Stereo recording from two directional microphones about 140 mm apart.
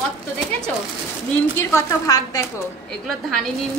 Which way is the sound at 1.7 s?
20° left (ahead or behind).